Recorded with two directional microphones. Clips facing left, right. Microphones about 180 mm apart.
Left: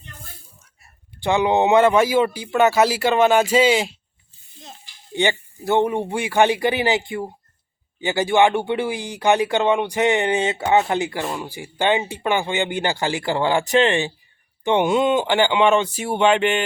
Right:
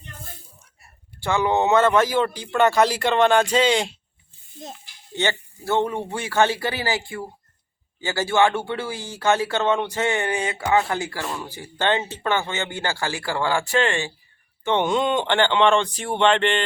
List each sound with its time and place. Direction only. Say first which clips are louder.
1.2 s speech: left 3 dB; 20° left (ahead or behind)
5.1 s speech: left 4 dB; 15° left (ahead or behind)